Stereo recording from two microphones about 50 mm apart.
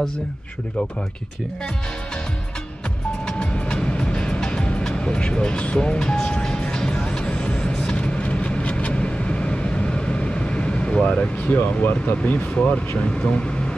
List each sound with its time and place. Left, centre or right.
3.3 s music: left
7.9 s vehicle: left
11.4 s speech: left
13.1 s speech: left